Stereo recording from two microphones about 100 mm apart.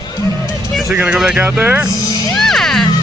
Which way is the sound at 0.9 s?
10° right (ahead or behind).